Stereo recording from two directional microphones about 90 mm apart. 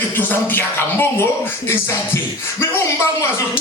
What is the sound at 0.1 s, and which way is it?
Speech, 20° left (ahead or behind).